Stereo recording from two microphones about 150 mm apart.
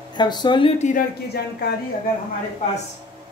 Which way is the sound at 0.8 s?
75° left (ahead or behind).